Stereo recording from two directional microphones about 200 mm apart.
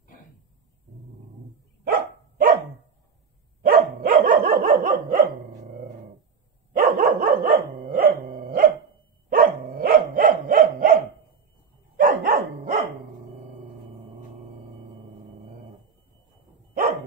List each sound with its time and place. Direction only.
1.9 s dog: 45° right (ahead or behind)
3.6 s dog: 50° right (ahead or behind)
12.0 s dog: 45° right (ahead or behind)